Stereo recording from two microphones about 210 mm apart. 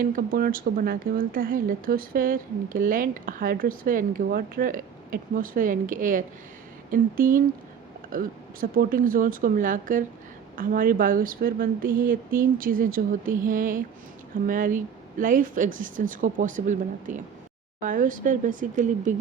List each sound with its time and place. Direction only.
0.0 s speech: 45° right (ahead or behind)